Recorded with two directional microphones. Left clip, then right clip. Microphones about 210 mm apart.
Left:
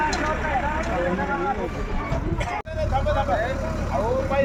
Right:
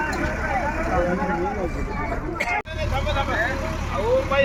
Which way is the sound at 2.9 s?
55° left (ahead or behind).